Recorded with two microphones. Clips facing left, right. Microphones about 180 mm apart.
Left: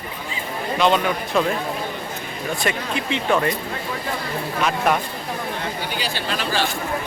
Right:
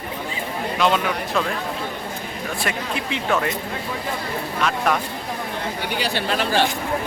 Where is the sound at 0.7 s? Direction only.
Centre (ahead or behind).